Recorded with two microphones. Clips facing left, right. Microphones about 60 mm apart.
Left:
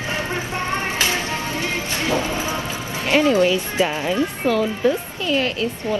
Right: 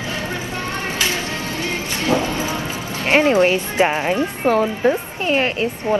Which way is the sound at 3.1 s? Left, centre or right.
Right.